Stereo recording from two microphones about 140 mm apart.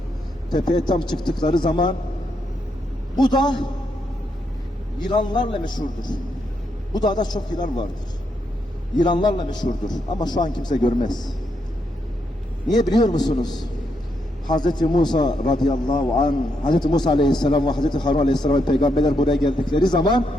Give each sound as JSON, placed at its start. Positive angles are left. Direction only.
{"t": 0.5, "sound": "a man's voice", "side_deg": 30}
{"t": 3.2, "sound": "a man's voice", "side_deg": 30}
{"t": 4.9, "sound": "a man's voice", "side_deg": 30}
{"t": 9.0, "sound": "a man's voice", "side_deg": 30}
{"t": 12.7, "sound": "a man's voice", "side_deg": 30}